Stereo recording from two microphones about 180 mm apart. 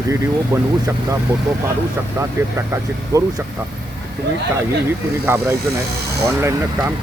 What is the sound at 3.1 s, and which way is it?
Speech, 20° right (ahead or behind).